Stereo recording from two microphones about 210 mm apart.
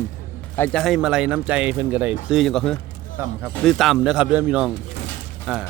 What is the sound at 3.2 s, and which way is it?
Speech, 10° right (ahead or behind).